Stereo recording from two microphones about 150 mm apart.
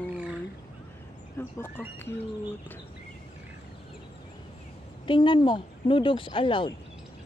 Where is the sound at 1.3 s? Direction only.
15° left (ahead or behind).